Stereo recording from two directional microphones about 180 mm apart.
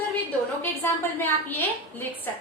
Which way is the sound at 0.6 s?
10° left (ahead or behind).